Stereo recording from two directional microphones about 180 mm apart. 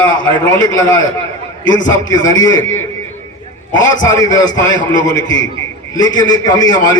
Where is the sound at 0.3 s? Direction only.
20° left (ahead or behind).